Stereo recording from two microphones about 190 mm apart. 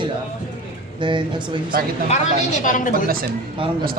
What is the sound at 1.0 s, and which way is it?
Speech, 25° right (ahead or behind).